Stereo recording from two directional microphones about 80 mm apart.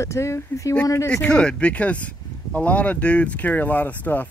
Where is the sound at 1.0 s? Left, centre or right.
Centre.